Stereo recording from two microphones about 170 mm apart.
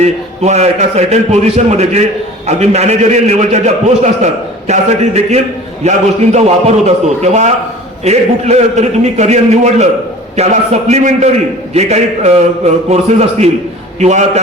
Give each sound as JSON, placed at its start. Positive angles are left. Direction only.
{"t": 0.0, "sound": "a man's voice", "side_deg": -40}